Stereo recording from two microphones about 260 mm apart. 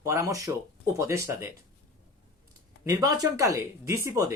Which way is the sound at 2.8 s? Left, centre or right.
Centre.